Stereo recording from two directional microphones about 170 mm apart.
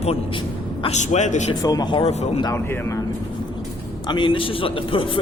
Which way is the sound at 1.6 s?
25° left (ahead or behind).